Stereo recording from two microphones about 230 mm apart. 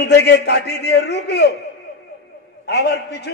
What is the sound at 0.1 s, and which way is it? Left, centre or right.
A man's voice, left.